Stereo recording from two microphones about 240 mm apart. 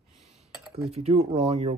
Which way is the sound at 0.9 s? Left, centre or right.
Right.